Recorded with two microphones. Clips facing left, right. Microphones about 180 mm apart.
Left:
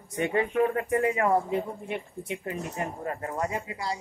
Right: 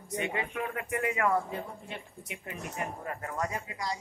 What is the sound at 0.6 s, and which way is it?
Speech, 35° left (ahead or behind).